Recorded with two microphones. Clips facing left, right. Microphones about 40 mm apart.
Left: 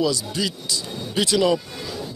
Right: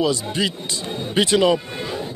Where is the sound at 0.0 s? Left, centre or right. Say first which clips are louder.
Right 2 dB; right.